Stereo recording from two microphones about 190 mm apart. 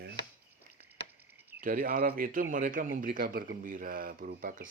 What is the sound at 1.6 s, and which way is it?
Speech, 45° right (ahead or behind).